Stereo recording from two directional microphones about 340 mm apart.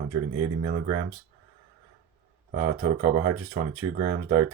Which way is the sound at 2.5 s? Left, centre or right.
Right.